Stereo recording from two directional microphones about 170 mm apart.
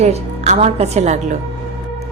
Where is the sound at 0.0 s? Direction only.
40° right (ahead or behind).